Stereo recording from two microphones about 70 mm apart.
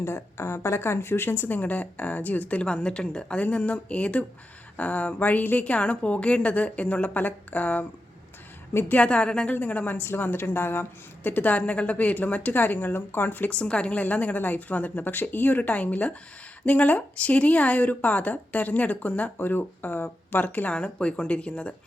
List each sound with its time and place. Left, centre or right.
0.0 s a woman's voice: left
9.0 s a woman's voice: centre